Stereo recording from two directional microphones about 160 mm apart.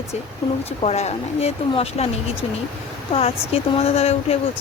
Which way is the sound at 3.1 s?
40° left (ahead or behind).